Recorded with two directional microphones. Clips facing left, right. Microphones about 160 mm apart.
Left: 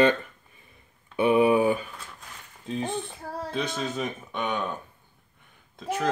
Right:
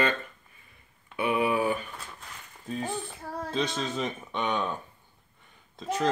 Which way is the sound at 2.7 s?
20° left (ahead or behind).